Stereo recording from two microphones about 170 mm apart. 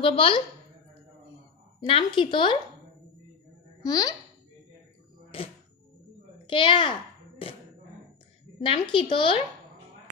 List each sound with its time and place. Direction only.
0.0 s a woman's voice: 30° left (ahead or behind)
1.8 s speech: 30° left (ahead or behind)
3.8 s speech: 20° left (ahead or behind)
5.3 s music: 35° left (ahead or behind)
6.4 s a child's voice: 30° left (ahead or behind)
8.5 s a woman's voice: 30° left (ahead or behind)